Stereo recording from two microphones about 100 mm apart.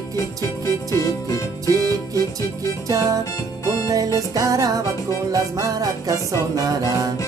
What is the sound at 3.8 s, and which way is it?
Music, 35° right (ahead or behind).